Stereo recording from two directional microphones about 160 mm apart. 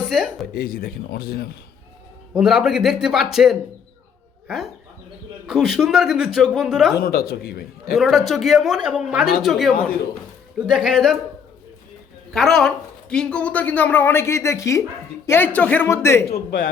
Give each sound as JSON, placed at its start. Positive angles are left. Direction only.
{"t": 0.1, "sound": "a man's voice", "side_deg": 0}
{"t": 0.5, "sound": "speech", "side_deg": 70}
{"t": 2.3, "sound": "a man's voice", "side_deg": -5}
{"t": 6.9, "sound": "speech", "side_deg": 70}
{"t": 7.9, "sound": "a man's voice", "side_deg": 0}
{"t": 12.3, "sound": "a woman's voice", "side_deg": 0}
{"t": 16.3, "sound": "a man's voice", "side_deg": 80}